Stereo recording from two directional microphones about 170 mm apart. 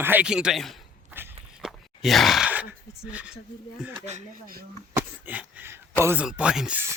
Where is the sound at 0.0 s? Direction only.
10° right (ahead or behind).